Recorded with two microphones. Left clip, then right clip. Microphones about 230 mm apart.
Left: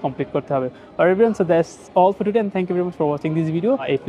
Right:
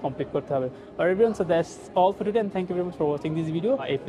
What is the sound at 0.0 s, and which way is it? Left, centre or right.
A man's voice, left.